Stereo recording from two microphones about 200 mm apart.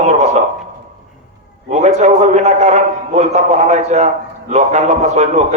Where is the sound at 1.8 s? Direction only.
35° right (ahead or behind).